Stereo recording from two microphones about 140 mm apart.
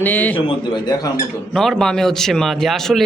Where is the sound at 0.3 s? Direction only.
40° left (ahead or behind).